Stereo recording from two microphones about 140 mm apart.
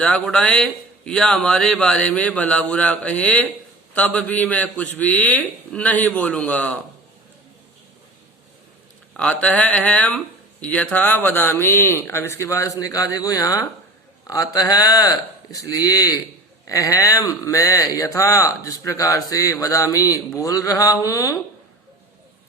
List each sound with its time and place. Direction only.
0.0 s speech: 5° left (ahead or behind)
9.4 s speech: 10° left (ahead or behind)